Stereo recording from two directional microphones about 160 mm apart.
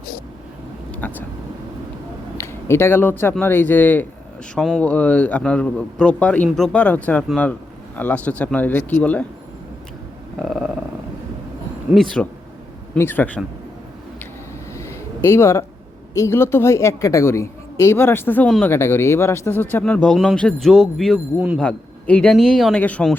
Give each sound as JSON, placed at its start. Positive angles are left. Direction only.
{"t": 1.0, "sound": "speech", "side_deg": 10}
{"t": 2.4, "sound": "a man's voice", "side_deg": 15}
{"t": 10.4, "sound": "speech", "side_deg": 0}
{"t": 11.9, "sound": "a man's voice", "side_deg": 5}
{"t": 14.8, "sound": "a sound", "side_deg": 15}
{"t": 16.1, "sound": "a man's voice", "side_deg": 15}
{"t": 21.6, "sound": "a man's voice", "side_deg": 5}